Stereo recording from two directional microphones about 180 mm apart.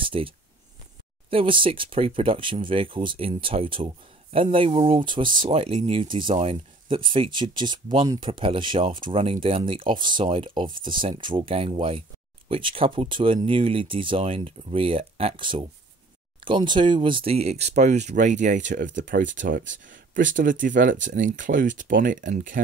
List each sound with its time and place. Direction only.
0.0 s speech: 30° right (ahead or behind)
1.3 s speech: 30° right (ahead or behind); by 22.6 s 50° right (ahead or behind)